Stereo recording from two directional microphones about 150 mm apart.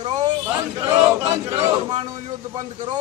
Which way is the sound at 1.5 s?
25° right (ahead or behind).